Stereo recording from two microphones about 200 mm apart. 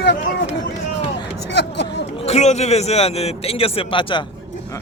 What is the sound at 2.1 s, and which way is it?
A man's voice, 30° left (ahead or behind).